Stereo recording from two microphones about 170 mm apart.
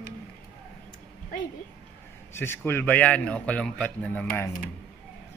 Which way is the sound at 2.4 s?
15° left (ahead or behind).